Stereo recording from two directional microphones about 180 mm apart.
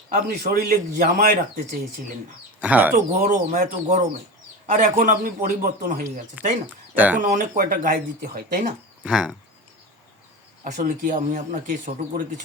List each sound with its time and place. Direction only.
0.1 s speech: 55° right (ahead or behind)
2.6 s speech: 10° right (ahead or behind)
3.1 s speech: 45° right (ahead or behind)
6.7 s speech: 10° right (ahead or behind)
7.2 s speech: 45° right (ahead or behind)
9.0 s speech: 5° right (ahead or behind)
10.6 s speech: 45° right (ahead or behind)